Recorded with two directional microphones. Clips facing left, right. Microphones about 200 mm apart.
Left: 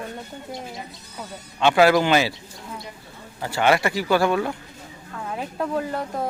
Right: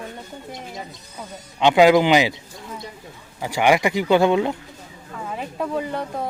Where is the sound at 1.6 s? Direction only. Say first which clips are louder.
Right 3 dB; 15° right (ahead or behind).